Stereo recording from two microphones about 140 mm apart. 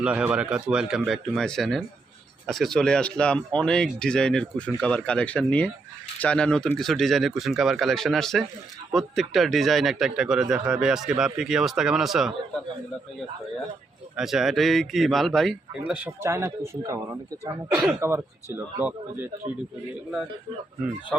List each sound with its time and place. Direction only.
0.0 s speech: 10° right (ahead or behind)
14.2 s speech: centre (ahead or behind)
15.8 s speech: 10° right (ahead or behind)